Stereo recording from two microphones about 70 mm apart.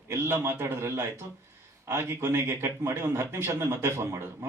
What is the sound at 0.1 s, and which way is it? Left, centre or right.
A man's voice, right.